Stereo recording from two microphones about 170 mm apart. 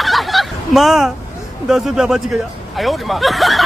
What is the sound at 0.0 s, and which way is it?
Fowl, centre (ahead or behind).